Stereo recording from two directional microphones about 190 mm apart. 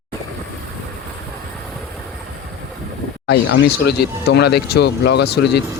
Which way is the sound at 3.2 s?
60° left (ahead or behind).